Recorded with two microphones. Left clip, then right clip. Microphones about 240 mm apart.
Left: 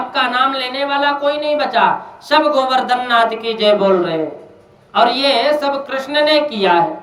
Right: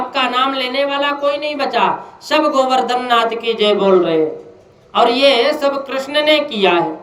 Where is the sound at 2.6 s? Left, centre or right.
Centre.